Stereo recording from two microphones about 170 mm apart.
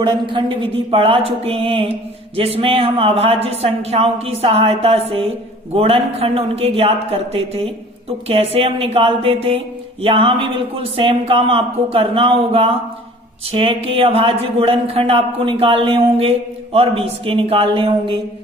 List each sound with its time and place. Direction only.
0.3 s speech: 30° right (ahead or behind)